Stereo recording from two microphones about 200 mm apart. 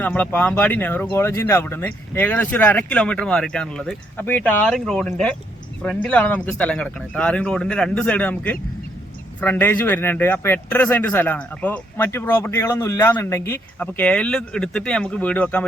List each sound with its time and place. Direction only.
0.0 s speech: 10° left (ahead or behind)